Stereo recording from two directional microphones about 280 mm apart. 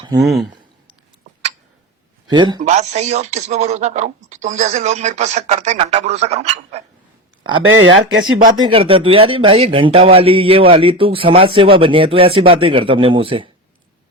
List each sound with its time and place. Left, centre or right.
0.0 s speech: centre
2.3 s speech: centre
7.7 s speech: right
8.6 s speech: centre